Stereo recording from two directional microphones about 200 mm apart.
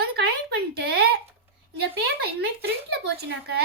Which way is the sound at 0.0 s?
55° right (ahead or behind).